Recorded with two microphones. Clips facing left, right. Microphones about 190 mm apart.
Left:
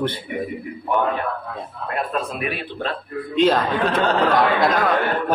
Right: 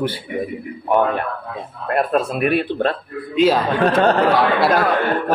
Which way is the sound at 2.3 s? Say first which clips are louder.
Right 9 dB; 55° right (ahead or behind).